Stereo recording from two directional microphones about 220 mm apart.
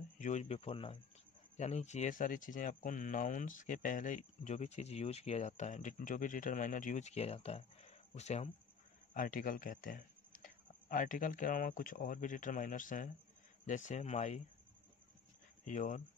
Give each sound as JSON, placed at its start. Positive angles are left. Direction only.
{"t": 0.2, "sound": "speech", "side_deg": 30}
{"t": 15.6, "sound": "speech", "side_deg": 35}